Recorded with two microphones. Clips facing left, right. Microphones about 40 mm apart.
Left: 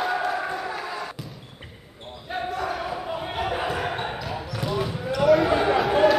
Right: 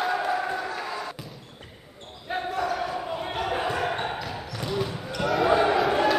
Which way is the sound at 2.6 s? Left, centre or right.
Centre.